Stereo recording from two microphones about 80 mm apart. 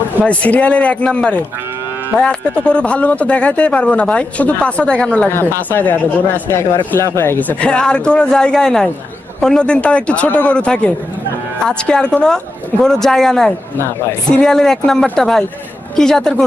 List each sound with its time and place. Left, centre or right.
0.3 s speech: centre
5.3 s speech: left; by 13.5 s centre
13.7 s speech: left
14.3 s speech: centre